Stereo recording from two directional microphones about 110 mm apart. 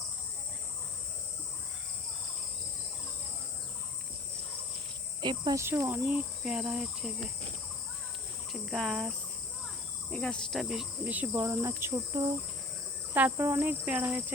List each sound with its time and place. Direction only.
5.2 s cricket: 45° right (ahead or behind)
5.5 s cricket: 25° right (ahead or behind)
6.1 s cricket: 10° right (ahead or behind)
8.5 s cricket: centre (ahead or behind)
11.0 s cricket: 15° right (ahead or behind)
13.1 s cricket: 20° right (ahead or behind)